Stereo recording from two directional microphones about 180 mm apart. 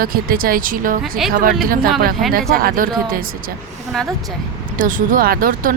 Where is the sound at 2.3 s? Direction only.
55° right (ahead or behind).